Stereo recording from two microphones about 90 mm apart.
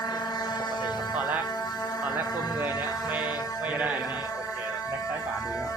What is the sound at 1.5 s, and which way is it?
Music, 45° left (ahead or behind).